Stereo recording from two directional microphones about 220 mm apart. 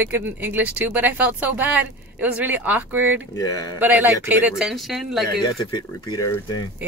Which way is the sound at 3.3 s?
15° left (ahead or behind).